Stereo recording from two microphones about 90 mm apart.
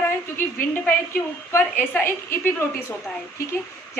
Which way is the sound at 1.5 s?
25° left (ahead or behind).